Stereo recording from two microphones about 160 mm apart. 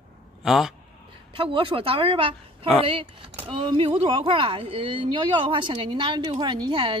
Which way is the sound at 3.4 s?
30° right (ahead or behind).